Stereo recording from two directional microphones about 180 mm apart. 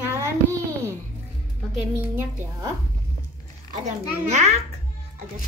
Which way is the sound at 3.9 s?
40° right (ahead or behind).